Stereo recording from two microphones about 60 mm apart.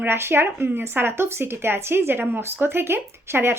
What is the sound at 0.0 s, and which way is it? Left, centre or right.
A woman's voice, right.